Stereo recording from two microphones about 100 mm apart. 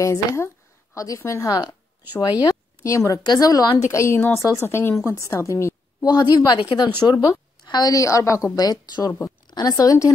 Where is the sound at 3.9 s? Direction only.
30° left (ahead or behind).